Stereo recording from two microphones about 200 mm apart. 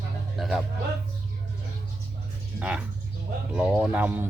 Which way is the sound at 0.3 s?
Centre (ahead or behind).